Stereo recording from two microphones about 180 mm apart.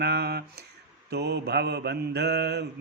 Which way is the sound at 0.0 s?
65° right (ahead or behind).